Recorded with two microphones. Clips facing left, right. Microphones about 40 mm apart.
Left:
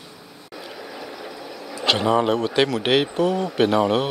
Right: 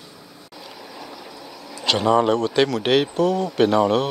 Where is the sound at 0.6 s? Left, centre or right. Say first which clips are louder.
Left 3 dB; left.